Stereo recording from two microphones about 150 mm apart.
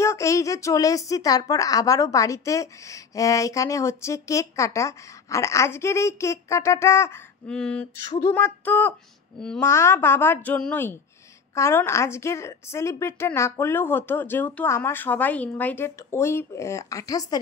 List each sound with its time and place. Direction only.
0.0 s a woman's voice: 20° left (ahead or behind)
7.4 s a woman's voice: 5° left (ahead or behind)
8.3 s a woman's voice: 15° left (ahead or behind)